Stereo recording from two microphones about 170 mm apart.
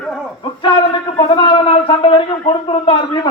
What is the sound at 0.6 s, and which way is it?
A man's voice, 25° left (ahead or behind).